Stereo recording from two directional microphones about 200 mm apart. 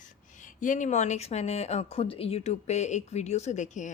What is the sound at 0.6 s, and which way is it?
Speech, 40° left (ahead or behind).